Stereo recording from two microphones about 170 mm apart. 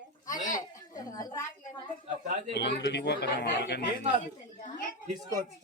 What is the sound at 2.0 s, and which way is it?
Speech, 45° right (ahead or behind).